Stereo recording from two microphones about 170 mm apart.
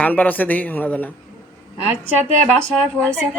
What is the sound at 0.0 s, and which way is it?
Speech, 10° left (ahead or behind).